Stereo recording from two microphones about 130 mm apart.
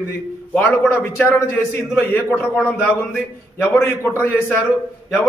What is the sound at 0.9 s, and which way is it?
Speech, 15° left (ahead or behind).